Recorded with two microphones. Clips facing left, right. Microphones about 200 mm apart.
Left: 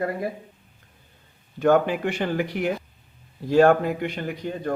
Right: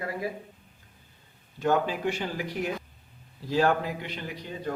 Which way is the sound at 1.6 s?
60° left (ahead or behind).